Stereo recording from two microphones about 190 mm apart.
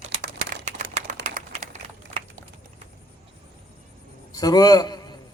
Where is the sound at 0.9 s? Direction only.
40° right (ahead or behind).